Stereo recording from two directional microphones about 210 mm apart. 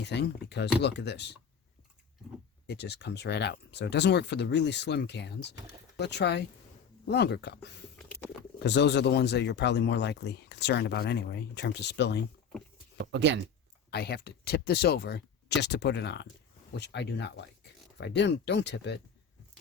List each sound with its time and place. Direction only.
0.0 s speech: 55° left (ahead or behind)
2.6 s speech: 55° left (ahead or behind)
13.0 s speech: 55° right (ahead or behind)
13.9 s speech: 50° left (ahead or behind)